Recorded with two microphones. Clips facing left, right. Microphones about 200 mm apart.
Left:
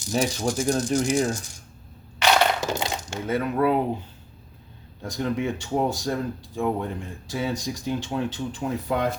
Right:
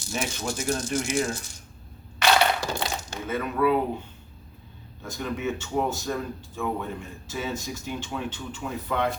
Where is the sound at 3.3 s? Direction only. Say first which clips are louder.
Left 1 dB; 35° left (ahead or behind).